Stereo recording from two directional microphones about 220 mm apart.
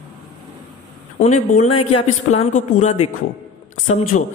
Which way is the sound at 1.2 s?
30° left (ahead or behind).